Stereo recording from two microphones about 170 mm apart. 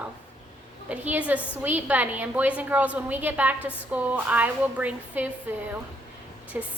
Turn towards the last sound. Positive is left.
turn(degrees=-10)  # may be behind; listen again after turning